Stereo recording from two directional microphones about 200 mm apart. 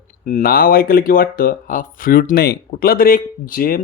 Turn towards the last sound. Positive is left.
turn(degrees=45)  # may be behind; listen again after turning